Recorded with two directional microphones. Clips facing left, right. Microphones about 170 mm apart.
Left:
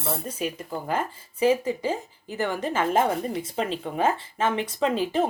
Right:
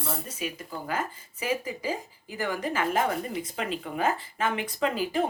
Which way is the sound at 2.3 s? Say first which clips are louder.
Left 3 dB; 25° left (ahead or behind).